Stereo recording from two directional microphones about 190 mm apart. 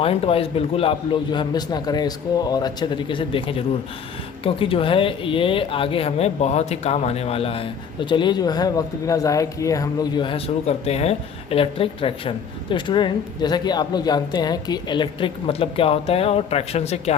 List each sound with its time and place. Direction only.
0.0 s speech: 30° left (ahead or behind)